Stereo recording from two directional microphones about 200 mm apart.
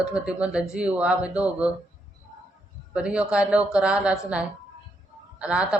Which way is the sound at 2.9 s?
5° right (ahead or behind).